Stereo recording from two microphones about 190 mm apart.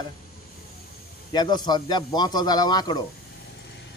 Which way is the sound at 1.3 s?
20° left (ahead or behind).